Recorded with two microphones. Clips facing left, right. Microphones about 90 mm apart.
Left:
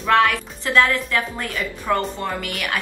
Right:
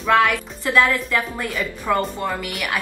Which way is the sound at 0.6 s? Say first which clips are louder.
Even; 15° right (ahead or behind).